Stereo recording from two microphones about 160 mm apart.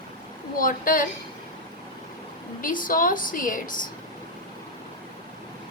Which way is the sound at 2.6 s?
60° left (ahead or behind).